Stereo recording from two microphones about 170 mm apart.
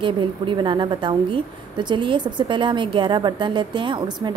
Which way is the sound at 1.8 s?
30° right (ahead or behind).